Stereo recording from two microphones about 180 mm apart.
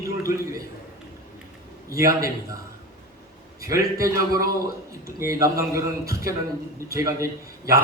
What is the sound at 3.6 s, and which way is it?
A man's voice, 15° right (ahead or behind).